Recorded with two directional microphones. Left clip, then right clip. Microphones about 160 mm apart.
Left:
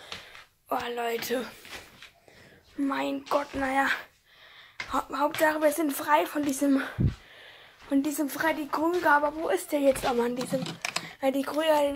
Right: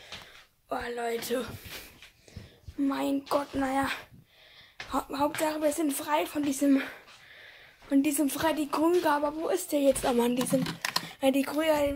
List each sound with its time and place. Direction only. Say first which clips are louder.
0.7 s a woman's voice: left 2 dB; 5° right (ahead or behind)
2.9 s speech: left 1 dB; 20° right (ahead or behind)
3.6 s a woman's voice: left 4 dB; 10° right (ahead or behind)
4.9 s speech: left 2 dB; 25° right (ahead or behind)
5.4 s a woman's voice: left 4 dB; centre (ahead or behind)
8.0 s speech: right 1 dB; 35° right (ahead or behind)
9.4 s a woman's voice: left 1 dB; 15° right (ahead or behind)
10.0 s speech: even; 40° right (ahead or behind)
11.5 s a woman's voice: left 2 dB; 5° right (ahead or behind)